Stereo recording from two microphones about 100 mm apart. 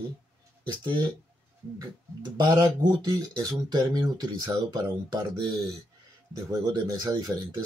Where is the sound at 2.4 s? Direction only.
45° right (ahead or behind).